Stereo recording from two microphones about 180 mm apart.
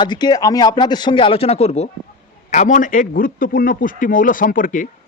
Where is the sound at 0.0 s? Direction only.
25° left (ahead or behind).